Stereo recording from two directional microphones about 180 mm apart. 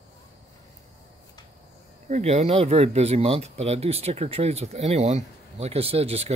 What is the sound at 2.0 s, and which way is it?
Speech, 40° right (ahead or behind).